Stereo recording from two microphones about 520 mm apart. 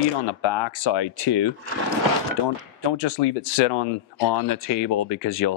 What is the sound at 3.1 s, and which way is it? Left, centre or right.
Speech, left.